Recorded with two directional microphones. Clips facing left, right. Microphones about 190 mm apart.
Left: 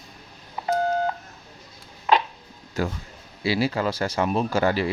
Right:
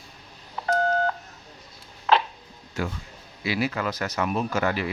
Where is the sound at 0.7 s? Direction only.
15° left (ahead or behind).